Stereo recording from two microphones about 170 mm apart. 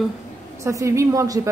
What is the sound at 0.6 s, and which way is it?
Speech, 15° right (ahead or behind).